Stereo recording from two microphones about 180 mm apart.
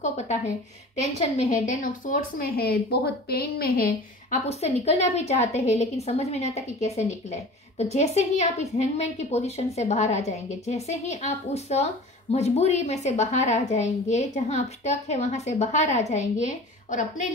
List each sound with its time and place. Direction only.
1.7 s a woman's voice: 45° left (ahead or behind)
4.5 s a woman's voice: 35° left (ahead or behind)